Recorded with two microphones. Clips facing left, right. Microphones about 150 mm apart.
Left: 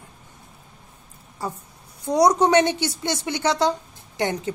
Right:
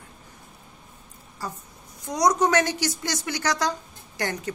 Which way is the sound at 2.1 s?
30° left (ahead or behind).